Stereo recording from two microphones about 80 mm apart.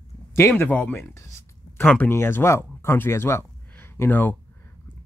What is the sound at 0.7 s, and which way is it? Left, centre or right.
Speech, centre.